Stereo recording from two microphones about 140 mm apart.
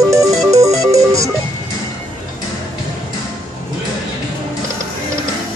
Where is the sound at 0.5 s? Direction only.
25° right (ahead or behind).